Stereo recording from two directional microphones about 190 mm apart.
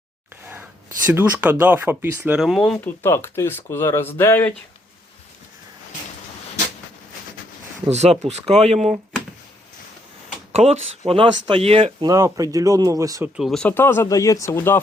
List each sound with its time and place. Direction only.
1.0 s speech: 10° right (ahead or behind)
2.4 s speech: centre (ahead or behind)
7.9 s speech: 35° right (ahead or behind)
10.5 s speech: 35° right (ahead or behind); by 13.3 s 15° right (ahead or behind)
13.3 s speech: centre (ahead or behind)